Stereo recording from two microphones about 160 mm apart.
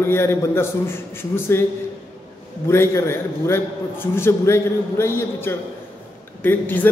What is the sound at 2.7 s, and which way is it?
A man's voice, 15° left (ahead or behind).